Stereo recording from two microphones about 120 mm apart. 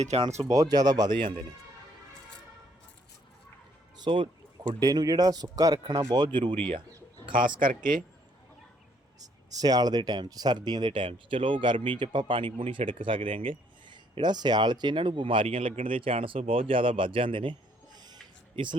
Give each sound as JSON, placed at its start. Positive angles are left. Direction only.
{"t": 0.3, "sound": "speech", "side_deg": -70}
{"t": 0.5, "sound": "speech", "side_deg": -35}
{"t": 3.9, "sound": "a sound", "side_deg": -40}
{"t": 4.7, "sound": "speech", "side_deg": -35}
{"t": 9.2, "sound": "speech", "side_deg": -30}